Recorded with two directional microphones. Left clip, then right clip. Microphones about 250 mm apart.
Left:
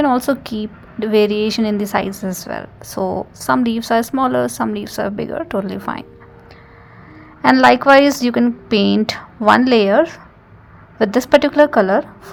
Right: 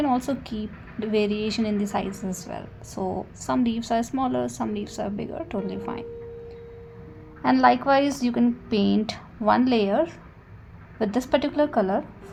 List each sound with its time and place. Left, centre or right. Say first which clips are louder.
0.0 s a woman's voice: left 9 dB; left
7.4 s a woman's voice: left 9 dB; left